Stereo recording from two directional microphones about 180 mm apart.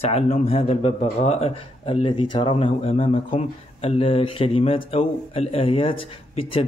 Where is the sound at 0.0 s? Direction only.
35° left (ahead or behind).